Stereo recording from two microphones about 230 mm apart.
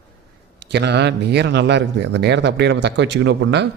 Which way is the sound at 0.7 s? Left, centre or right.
Right.